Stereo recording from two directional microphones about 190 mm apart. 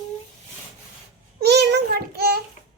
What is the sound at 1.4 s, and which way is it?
A child's voice, 60° right (ahead or behind).